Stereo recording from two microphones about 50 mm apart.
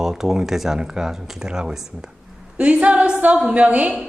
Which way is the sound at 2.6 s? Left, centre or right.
Right.